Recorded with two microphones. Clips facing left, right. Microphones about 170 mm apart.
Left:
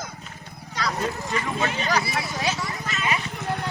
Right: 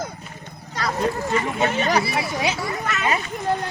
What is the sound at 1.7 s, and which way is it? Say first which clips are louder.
Speech: right 5 dB; 45° right (ahead or behind).